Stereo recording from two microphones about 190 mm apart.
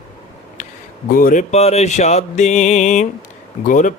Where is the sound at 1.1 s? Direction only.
45° left (ahead or behind).